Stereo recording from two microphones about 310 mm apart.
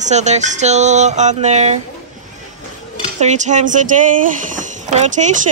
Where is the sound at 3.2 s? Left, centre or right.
Right.